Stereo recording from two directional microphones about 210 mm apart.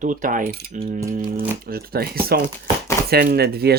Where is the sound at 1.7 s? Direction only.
45° right (ahead or behind).